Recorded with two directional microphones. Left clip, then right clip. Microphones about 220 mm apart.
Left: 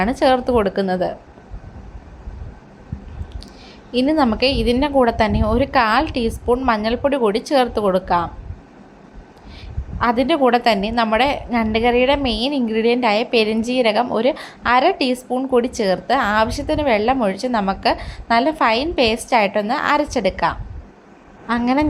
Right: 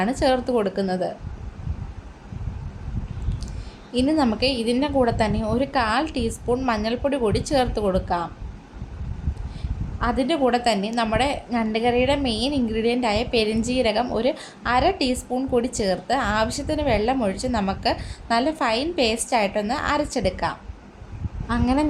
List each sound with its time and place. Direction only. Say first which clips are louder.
0.0 s a woman's voice: left 5 dB; 15° left (ahead or behind)
3.9 s a woman's voice: left 4 dB; 15° left (ahead or behind)
10.0 s a woman's voice: left 6 dB; 15° left (ahead or behind)